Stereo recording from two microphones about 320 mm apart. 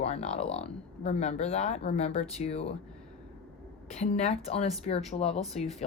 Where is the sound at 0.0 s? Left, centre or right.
Centre.